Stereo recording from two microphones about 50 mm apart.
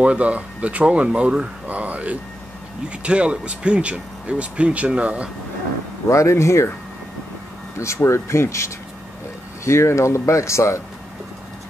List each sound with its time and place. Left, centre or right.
0.0 s speech: right
1.7 s speech: right
6.0 s speech: left
7.8 s speech: left